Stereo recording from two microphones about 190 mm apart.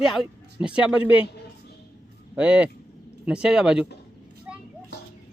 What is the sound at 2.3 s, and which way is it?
Speech, 5° right (ahead or behind).